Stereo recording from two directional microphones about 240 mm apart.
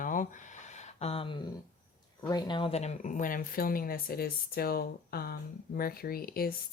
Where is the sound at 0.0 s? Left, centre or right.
Left.